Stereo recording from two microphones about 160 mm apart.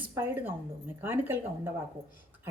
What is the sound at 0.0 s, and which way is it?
A woman's voice, 15° right (ahead or behind).